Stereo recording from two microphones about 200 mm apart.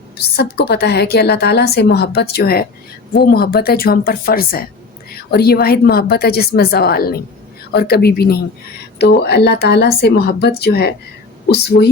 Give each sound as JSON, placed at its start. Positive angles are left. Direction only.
{"t": 0.2, "sound": "a woman's voice", "side_deg": 50}